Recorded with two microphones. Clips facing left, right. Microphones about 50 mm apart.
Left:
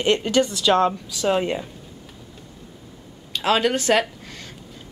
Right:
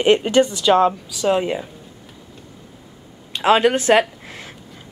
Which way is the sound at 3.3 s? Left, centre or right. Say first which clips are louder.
Right 5 dB; right.